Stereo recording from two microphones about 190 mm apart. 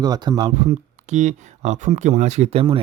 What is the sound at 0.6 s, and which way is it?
Speech, 35° right (ahead or behind).